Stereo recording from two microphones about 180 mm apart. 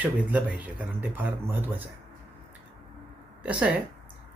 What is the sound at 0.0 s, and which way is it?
Speech, 10° right (ahead or behind).